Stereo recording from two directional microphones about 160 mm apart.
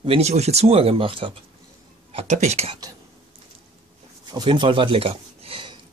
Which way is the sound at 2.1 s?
45° right (ahead or behind).